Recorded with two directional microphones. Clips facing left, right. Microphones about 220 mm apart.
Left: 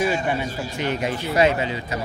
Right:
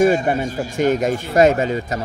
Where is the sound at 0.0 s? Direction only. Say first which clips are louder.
Right 7 dB; 45° right (ahead or behind).